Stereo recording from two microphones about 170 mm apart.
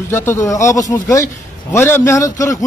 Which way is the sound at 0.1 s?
15° left (ahead or behind).